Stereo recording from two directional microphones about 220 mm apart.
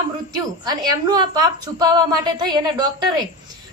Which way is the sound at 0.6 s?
20° right (ahead or behind).